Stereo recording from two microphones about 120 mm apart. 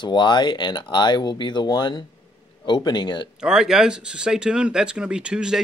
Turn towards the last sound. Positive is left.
turn(degrees=-5)  # may be behind; listen again after turning